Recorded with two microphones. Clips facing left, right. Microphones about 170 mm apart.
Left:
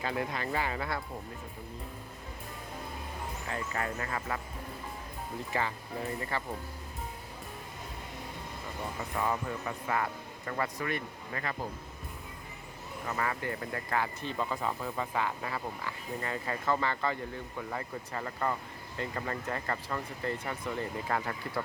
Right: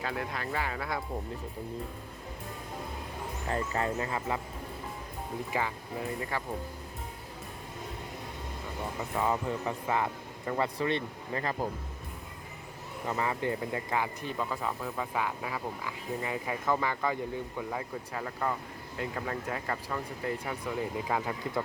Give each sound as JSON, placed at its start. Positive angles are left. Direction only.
{"t": 0.0, "sound": "speech", "side_deg": 0}
{"t": 3.5, "sound": "speech", "side_deg": -25}
{"t": 5.5, "sound": "speech", "side_deg": -10}
{"t": 9.1, "sound": "speech", "side_deg": -20}
{"t": 13.1, "sound": "speech", "side_deg": -20}
{"t": 14.3, "sound": "speech", "side_deg": 0}